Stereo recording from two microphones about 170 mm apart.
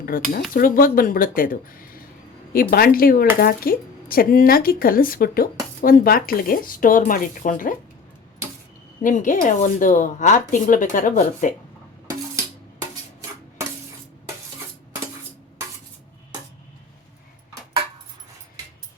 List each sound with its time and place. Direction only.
0.0 s speech: 55° left (ahead or behind)
9.0 s speech: 50° left (ahead or behind)